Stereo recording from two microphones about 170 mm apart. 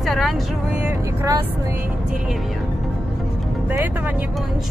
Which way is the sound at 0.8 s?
20° right (ahead or behind).